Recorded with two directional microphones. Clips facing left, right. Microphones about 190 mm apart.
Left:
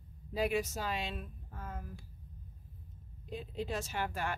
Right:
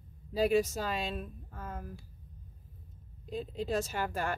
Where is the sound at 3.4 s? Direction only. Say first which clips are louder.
Right 6 dB; 40° right (ahead or behind).